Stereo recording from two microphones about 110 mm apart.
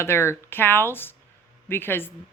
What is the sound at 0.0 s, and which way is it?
Speech, 25° left (ahead or behind).